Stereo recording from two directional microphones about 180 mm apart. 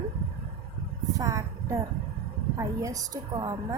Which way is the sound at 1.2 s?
15° right (ahead or behind).